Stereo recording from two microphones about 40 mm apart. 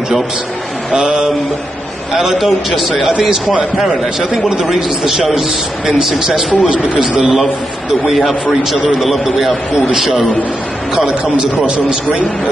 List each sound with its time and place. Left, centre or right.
0.9 s a man's voice: centre
3.1 s a man's voice: centre
11.3 s a man's voice: right